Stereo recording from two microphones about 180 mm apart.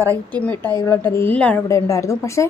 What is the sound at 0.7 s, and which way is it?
A woman's voice, 15° left (ahead or behind).